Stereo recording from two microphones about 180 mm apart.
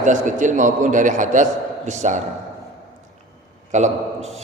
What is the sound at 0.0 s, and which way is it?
A man's voice, 45° right (ahead or behind).